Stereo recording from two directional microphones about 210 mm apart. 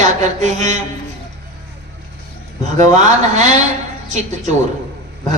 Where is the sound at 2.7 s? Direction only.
35° right (ahead or behind).